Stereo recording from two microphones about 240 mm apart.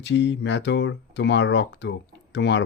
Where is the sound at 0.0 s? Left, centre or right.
Left.